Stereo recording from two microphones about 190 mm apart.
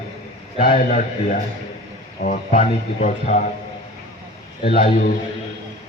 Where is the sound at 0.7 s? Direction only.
35° left (ahead or behind).